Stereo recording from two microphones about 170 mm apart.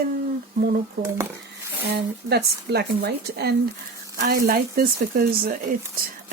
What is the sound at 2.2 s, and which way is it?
Speech, 75° right (ahead or behind).